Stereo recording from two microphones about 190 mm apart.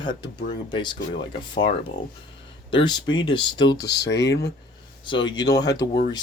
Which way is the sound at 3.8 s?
65° left (ahead or behind).